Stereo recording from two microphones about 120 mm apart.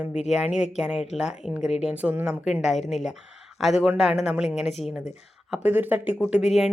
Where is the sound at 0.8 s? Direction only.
Centre (ahead or behind).